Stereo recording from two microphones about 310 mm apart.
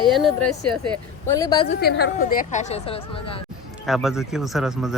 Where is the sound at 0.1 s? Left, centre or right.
Centre.